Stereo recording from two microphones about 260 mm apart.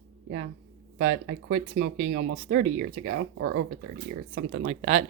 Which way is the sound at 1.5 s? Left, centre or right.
Right.